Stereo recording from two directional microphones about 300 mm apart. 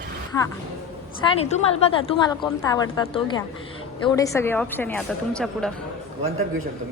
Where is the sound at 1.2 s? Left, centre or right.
Left; by 5.7 s centre.